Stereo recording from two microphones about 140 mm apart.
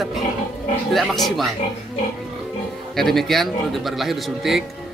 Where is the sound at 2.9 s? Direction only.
Centre (ahead or behind).